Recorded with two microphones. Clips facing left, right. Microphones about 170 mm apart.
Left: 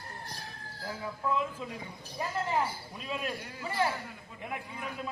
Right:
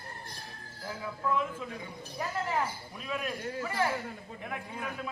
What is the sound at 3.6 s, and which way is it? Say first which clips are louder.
Speech: left 1 dB; 25° left (ahead or behind).